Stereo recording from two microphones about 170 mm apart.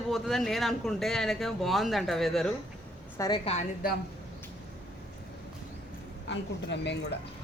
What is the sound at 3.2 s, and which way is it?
Speech, 20° left (ahead or behind).